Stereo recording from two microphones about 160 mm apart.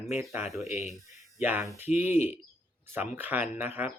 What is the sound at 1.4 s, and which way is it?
Speech, 10° right (ahead or behind).